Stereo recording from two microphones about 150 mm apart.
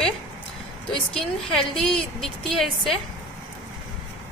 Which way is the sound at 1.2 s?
5° left (ahead or behind).